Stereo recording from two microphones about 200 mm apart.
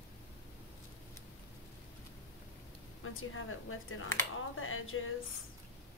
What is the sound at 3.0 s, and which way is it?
Speech, 90° left.